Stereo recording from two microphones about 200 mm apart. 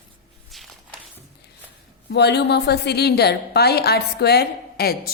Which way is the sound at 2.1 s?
55° left (ahead or behind).